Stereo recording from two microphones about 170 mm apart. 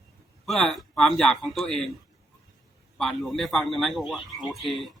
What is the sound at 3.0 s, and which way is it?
A man's voice, centre (ahead or behind).